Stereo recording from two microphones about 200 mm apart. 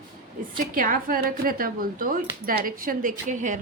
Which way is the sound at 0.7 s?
45° right (ahead or behind).